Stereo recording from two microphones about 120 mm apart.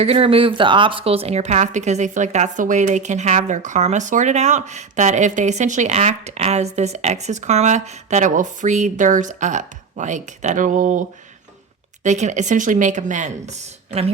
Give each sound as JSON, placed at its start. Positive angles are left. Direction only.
{"t": 0.0, "sound": "a woman's voice", "side_deg": -55}
{"t": 12.0, "sound": "speech", "side_deg": -85}